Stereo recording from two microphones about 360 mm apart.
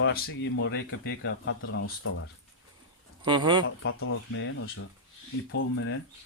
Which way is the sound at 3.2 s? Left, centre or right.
Centre.